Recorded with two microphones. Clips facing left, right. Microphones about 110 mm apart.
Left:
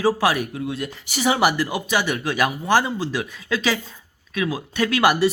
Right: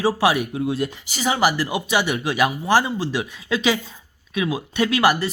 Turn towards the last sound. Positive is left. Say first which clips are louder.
# even
turn(degrees=0)  # may be behind; listen again after turning